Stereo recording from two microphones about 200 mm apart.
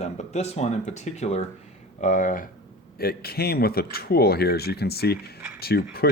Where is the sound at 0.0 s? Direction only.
35° left (ahead or behind).